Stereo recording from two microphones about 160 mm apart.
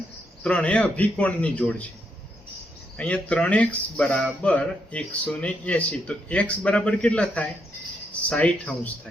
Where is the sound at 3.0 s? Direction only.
10° left (ahead or behind).